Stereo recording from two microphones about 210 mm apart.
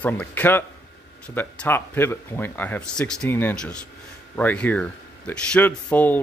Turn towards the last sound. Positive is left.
turn(degrees=10)  # may be behind; listen again after turning